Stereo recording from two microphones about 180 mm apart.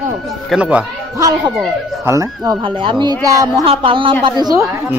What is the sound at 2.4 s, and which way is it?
Speech, 25° right (ahead or behind).